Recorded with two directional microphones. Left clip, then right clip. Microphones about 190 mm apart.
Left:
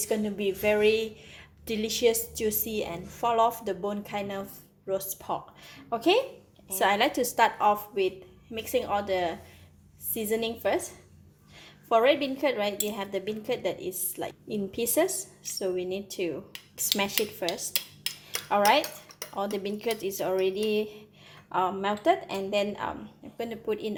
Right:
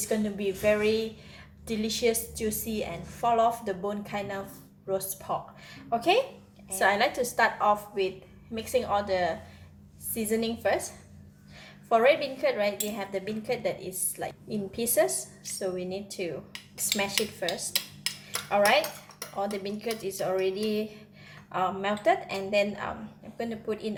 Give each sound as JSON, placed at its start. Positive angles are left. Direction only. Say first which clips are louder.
{"t": 0.0, "sound": "a woman's voice", "louder": "left 1 dB", "side_deg": 35}
{"t": 18.4, "sound": "a woman's voice", "louder": "even", "side_deg": 35}